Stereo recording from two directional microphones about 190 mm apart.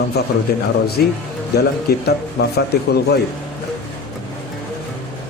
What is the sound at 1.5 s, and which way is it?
A man's voice, 60° left (ahead or behind).